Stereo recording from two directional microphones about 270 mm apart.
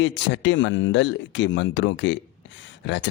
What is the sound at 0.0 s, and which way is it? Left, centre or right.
Speech, left.